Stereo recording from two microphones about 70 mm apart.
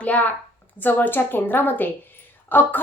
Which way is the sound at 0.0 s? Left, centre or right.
Left.